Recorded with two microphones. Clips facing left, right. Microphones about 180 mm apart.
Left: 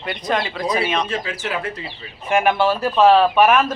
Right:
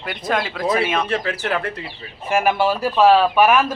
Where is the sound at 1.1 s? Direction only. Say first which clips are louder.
Right 3 dB; 60° right (ahead or behind).